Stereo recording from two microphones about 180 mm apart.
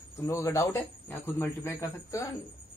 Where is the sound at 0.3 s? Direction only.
15° left (ahead or behind).